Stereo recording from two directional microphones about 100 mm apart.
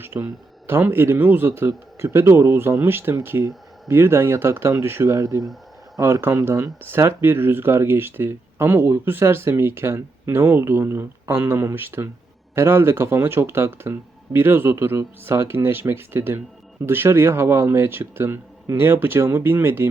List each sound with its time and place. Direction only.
0.0 s speech: 25° right (ahead or behind)